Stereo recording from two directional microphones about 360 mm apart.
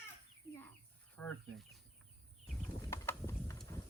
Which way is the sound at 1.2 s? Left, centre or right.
Centre.